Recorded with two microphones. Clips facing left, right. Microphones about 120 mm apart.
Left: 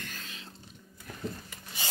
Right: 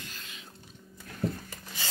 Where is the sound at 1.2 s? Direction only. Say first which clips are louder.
Right 6 dB; 65° right (ahead or behind).